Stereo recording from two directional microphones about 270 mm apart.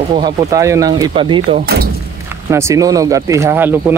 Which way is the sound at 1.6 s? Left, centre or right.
Right.